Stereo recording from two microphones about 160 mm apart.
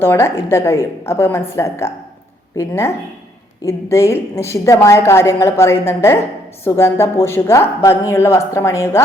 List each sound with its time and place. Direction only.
0.0 s a woman's voice: 15° left (ahead or behind)